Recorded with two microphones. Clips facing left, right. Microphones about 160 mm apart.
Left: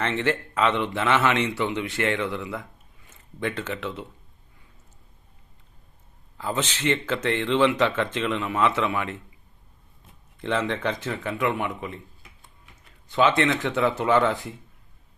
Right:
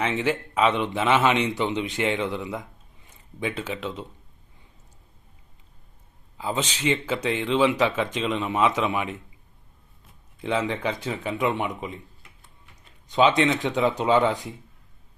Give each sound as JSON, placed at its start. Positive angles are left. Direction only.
{"t": 0.0, "sound": "speech", "side_deg": -10}
{"t": 6.3, "sound": "speech", "side_deg": -15}
{"t": 10.3, "sound": "speech", "side_deg": -10}